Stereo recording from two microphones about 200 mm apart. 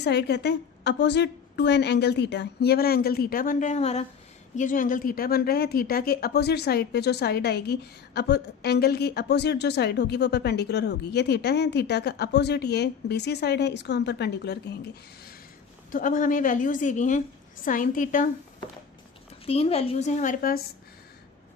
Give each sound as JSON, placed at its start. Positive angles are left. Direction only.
{"t": 0.0, "sound": "a woman's voice", "side_deg": 55}
{"t": 15.9, "sound": "a woman's voice", "side_deg": 40}
{"t": 19.5, "sound": "a woman's voice", "side_deg": 30}